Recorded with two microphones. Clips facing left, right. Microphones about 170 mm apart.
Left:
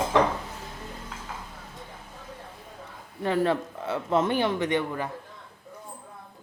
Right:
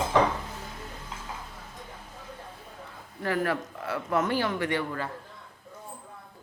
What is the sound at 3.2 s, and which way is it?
Speech, 25° left (ahead or behind).